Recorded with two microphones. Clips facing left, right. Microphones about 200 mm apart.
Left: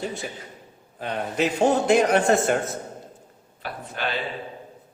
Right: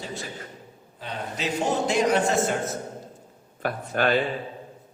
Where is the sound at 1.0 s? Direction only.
55° left (ahead or behind).